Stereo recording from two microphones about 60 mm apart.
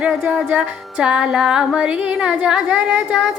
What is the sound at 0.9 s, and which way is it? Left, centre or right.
Music, centre.